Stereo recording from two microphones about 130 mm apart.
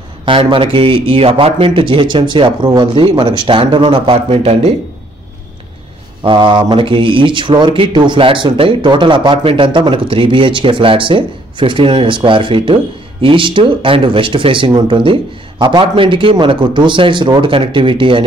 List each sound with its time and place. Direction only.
0.2 s speech: 40° right (ahead or behind)
6.2 s speech: 40° right (ahead or behind)